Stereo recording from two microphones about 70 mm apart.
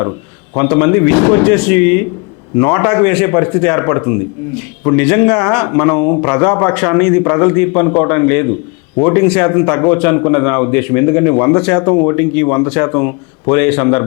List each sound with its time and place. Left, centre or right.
0.5 s speech: left